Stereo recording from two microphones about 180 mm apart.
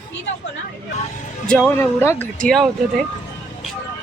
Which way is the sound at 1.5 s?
5° left (ahead or behind).